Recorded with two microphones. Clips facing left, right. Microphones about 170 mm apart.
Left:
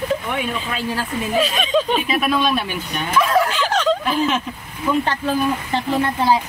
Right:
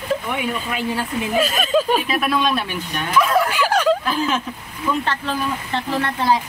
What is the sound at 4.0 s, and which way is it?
Speech, centre (ahead or behind).